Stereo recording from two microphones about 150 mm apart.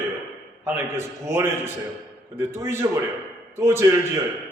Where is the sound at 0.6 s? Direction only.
15° right (ahead or behind).